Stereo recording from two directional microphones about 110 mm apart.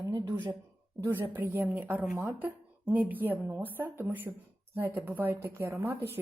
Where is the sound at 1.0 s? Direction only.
15° right (ahead or behind).